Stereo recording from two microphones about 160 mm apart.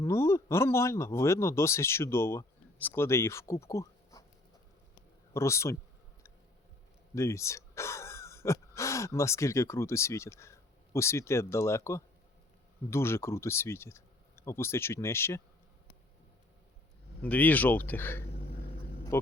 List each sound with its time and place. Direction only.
0.0 s speech: 15° left (ahead or behind)
5.3 s speech: 15° left (ahead or behind)
7.2 s speech: 20° left (ahead or behind)
17.2 s speech: 10° left (ahead or behind)